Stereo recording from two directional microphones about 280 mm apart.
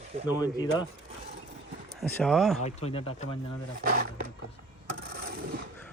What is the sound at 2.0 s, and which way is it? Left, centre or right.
Speech, centre.